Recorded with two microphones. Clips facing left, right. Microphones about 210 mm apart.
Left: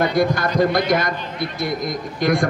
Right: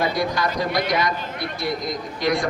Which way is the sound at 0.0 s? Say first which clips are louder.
Left 4 dB; 50° left (ahead or behind).